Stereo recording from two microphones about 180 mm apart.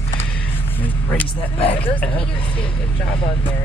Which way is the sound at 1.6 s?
30° left (ahead or behind).